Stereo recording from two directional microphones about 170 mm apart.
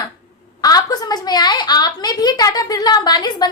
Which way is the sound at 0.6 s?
20° left (ahead or behind).